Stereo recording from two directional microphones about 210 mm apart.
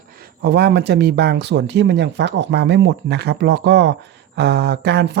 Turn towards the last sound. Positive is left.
turn(degrees=-55)  # may be behind; listen again after turning